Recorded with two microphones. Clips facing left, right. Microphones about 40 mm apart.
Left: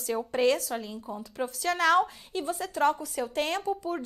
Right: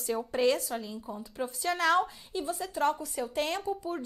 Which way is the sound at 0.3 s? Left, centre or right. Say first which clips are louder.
Left 2 dB; left.